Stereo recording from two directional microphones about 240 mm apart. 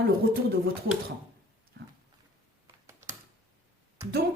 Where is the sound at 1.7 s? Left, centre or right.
Right.